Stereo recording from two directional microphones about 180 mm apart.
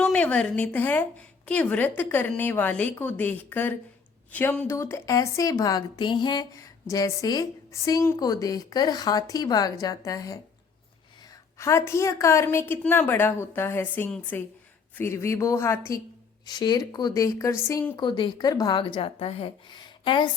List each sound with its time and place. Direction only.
0.0 s a woman's voice: 10° left (ahead or behind)
11.5 s a woman's voice: 15° left (ahead or behind)